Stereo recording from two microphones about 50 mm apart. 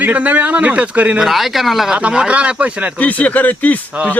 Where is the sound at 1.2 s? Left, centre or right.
Centre.